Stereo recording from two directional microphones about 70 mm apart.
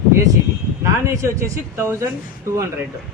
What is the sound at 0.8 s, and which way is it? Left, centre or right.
Speech, right.